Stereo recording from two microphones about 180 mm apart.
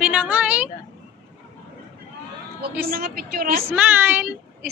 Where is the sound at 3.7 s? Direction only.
10° right (ahead or behind).